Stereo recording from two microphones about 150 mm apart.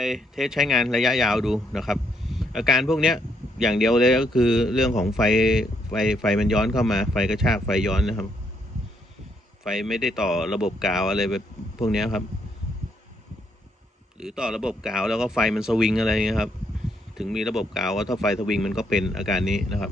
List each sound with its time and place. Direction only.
0.0 s speech: centre (ahead or behind)
9.6 s speech: centre (ahead or behind)
14.2 s speech: 5° right (ahead or behind)